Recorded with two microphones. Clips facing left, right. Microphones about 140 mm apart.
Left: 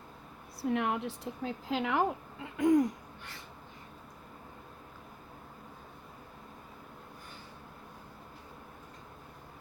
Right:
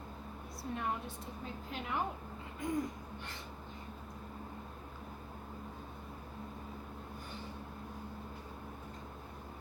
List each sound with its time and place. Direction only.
0.7 s speech: 80° left